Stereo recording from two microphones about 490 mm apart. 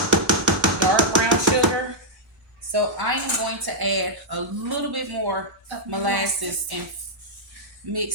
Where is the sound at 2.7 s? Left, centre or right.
Right.